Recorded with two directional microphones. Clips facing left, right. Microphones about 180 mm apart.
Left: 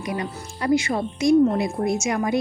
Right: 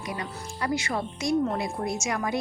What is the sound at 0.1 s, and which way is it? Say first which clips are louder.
Speech: left 6 dB; 15° left (ahead or behind).